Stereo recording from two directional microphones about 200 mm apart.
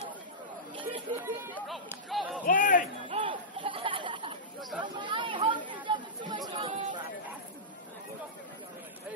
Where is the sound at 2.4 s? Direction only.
40° left (ahead or behind).